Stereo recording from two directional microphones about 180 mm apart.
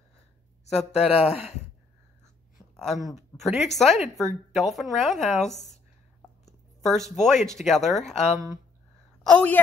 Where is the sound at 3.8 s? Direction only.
Centre (ahead or behind).